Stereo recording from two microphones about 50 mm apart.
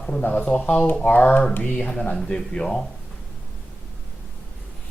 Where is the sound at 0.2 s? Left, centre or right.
Left.